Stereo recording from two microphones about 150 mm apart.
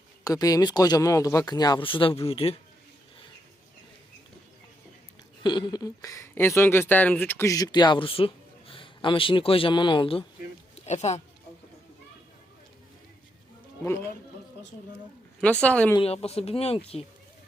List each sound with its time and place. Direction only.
0.3 s speech: 25° left (ahead or behind); by 2.6 s 40° left (ahead or behind)
5.4 s speech: 30° left (ahead or behind)
10.8 s speech: 50° left (ahead or behind)
13.8 s speech: 20° left (ahead or behind)
15.4 s speech: 5° left (ahead or behind)
16.0 s speech: 40° left (ahead or behind)